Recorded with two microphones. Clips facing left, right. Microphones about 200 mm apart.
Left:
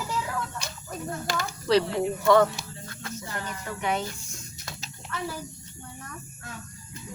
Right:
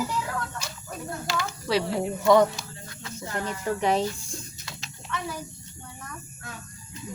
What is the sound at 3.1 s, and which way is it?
Speech, 35° right (ahead or behind).